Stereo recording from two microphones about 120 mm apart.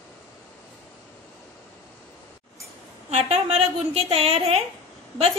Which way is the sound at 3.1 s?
65° right (ahead or behind).